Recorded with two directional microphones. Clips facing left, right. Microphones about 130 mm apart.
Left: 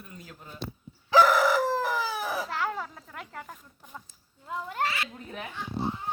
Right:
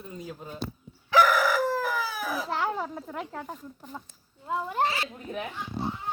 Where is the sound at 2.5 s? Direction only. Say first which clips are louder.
Right 3 dB; 20° right (ahead or behind).